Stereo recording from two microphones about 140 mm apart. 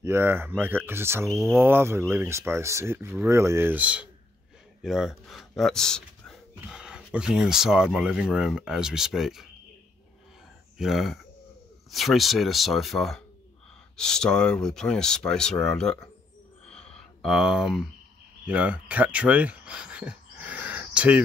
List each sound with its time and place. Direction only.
0.0 s speech: 15° right (ahead or behind)
10.8 s speech: centre (ahead or behind)
16.6 s a sound: 5° left (ahead or behind); by 21.2 s 10° right (ahead or behind)